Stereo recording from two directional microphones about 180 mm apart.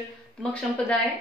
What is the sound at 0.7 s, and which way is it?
Speech, 5° left (ahead or behind).